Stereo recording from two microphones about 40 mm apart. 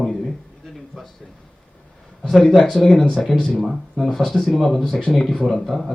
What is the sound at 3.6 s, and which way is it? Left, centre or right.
Speech, centre.